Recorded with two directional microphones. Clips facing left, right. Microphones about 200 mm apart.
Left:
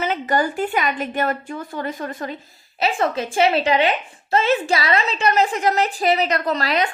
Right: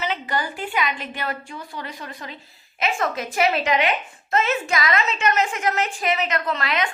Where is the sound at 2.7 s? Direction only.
30° left (ahead or behind).